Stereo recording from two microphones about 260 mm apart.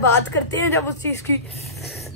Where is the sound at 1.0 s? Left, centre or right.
Centre.